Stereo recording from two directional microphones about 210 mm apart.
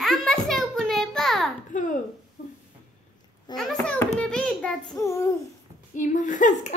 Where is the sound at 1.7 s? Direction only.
35° left (ahead or behind).